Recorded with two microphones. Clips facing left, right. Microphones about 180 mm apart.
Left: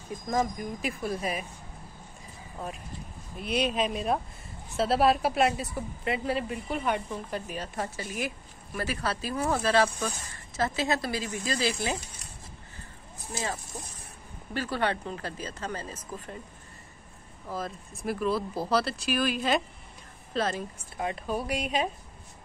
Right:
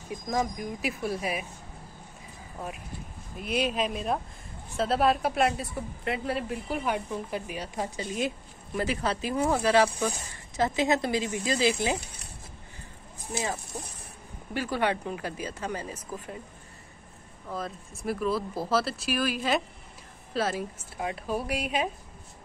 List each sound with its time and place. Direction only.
0.1 s a woman's voice: centre (ahead or behind)
3.3 s a woman's voice: 5° right (ahead or behind)
13.2 s speech: 15° right (ahead or behind)
17.5 s a woman's voice: centre (ahead or behind)